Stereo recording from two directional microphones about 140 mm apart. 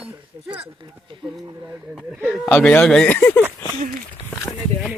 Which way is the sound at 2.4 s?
10° left (ahead or behind).